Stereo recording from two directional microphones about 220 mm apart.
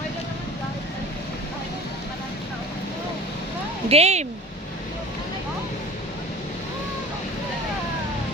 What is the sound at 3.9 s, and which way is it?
Speech, 30° right (ahead or behind).